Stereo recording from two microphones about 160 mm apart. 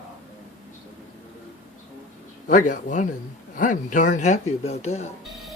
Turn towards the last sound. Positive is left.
turn(degrees=40)  # may be behind; listen again after turning